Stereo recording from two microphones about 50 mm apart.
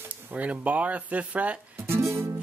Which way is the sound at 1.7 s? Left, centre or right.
Right.